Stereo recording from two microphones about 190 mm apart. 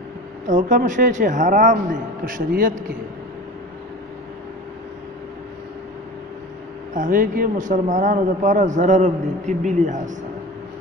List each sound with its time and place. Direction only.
0.5 s a man's voice: 40° right (ahead or behind)
6.9 s a man's voice: 45° right (ahead or behind)